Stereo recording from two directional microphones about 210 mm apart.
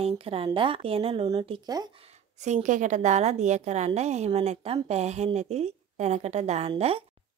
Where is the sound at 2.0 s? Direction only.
30° right (ahead or behind).